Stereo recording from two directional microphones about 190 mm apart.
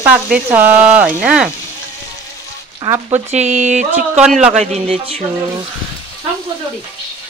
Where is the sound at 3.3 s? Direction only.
40° right (ahead or behind).